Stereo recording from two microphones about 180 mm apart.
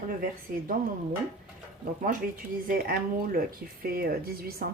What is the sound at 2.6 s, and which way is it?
Speech, 55° right (ahead or behind).